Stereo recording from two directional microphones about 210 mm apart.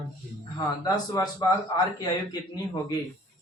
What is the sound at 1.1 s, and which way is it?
Speech, 15° left (ahead or behind).